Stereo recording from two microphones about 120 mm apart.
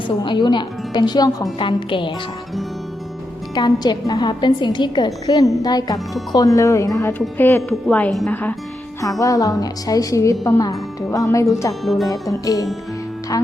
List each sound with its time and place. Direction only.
0.2 s a woman's voice: 35° left (ahead or behind)
3.5 s a woman's voice: 35° left (ahead or behind); by 8.5 s 15° left (ahead or behind)
9.0 s speech: 30° left (ahead or behind)
11.9 s speech: centre (ahead or behind)
12.3 s speech: 30° left (ahead or behind)